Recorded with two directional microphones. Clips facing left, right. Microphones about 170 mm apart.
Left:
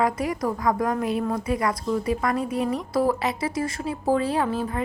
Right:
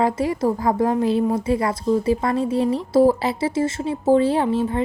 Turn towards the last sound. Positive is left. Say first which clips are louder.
# right 5 dB
turn(degrees=-25)  # may be behind; listen again after turning